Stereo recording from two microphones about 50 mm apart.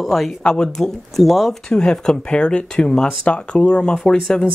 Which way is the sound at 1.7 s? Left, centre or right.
Centre.